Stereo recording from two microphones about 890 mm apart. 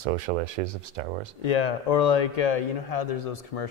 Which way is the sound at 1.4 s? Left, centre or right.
Left.